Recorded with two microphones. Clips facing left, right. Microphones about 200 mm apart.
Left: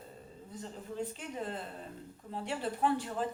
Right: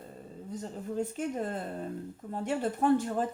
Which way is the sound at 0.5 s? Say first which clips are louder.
Right 6 dB; 45° right (ahead or behind).